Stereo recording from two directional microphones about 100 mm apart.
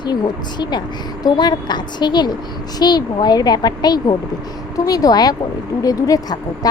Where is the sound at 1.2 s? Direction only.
45° left (ahead or behind).